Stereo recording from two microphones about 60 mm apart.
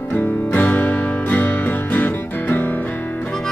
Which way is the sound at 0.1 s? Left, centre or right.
Left.